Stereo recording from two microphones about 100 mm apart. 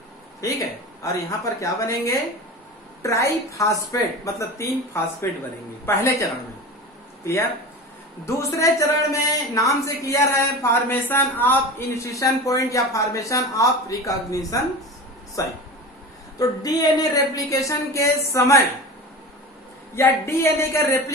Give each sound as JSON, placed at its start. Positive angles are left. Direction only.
{"t": 1.0, "sound": "speech", "side_deg": 30}
{"t": 8.4, "sound": "speech", "side_deg": 30}
{"t": 12.0, "sound": "speech", "side_deg": 30}
{"t": 20.0, "sound": "speech", "side_deg": 25}